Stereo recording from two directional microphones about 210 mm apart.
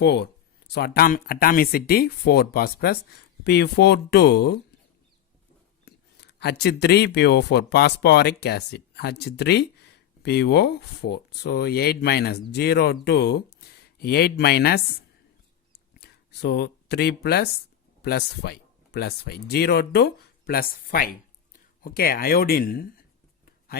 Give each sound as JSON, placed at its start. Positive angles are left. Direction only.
{"t": 0.0, "sound": "speech", "side_deg": 50}
{"t": 5.8, "sound": "speech", "side_deg": 50}
{"t": 16.0, "sound": "speech", "side_deg": 50}